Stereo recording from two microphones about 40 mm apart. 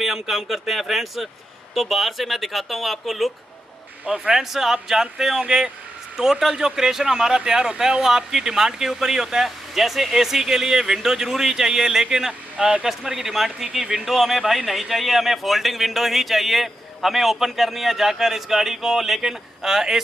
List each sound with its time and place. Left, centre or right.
0.0 s speech: centre
4.0 s speech: right
4.4 s speech: centre